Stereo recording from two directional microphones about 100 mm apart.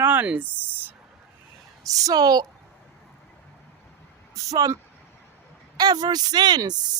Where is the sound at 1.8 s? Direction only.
35° right (ahead or behind).